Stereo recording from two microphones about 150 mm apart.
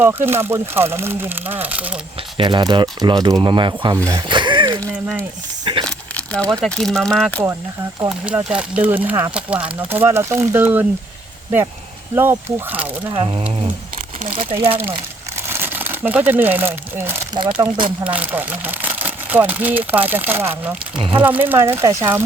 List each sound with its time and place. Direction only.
0.0 s speech: 15° right (ahead or behind)
2.4 s speech: 30° right (ahead or behind)
4.0 s a sound: 30° right (ahead or behind)
5.8 s speech: 10° left (ahead or behind)
8.4 s speech: 5° right (ahead or behind)
12.1 s speech: 15° right (ahead or behind)
13.1 s speech: 40° right (ahead or behind)
15.4 s speech: 15° right (ahead or behind)
17.6 s speech: 35° right (ahead or behind)
18.0 s speech: 10° right (ahead or behind)